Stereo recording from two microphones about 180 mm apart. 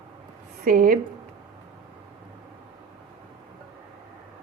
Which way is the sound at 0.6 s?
50° right (ahead or behind).